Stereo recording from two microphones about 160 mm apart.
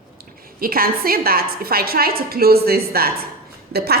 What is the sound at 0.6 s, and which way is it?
Speech, 65° right (ahead or behind).